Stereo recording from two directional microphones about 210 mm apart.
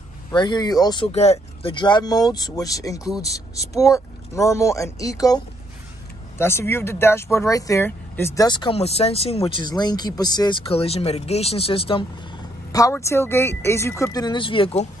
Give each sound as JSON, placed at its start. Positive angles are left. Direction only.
{"t": 0.3, "sound": "speech", "side_deg": 20}
{"t": 12.7, "sound": "speech", "side_deg": 15}